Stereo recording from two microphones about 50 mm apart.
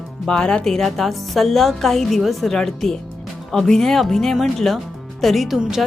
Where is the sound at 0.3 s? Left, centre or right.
Centre.